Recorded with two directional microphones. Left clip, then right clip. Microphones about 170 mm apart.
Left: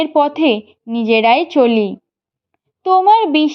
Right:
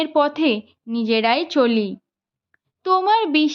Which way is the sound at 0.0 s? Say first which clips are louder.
Left 5 dB; 5° left (ahead or behind).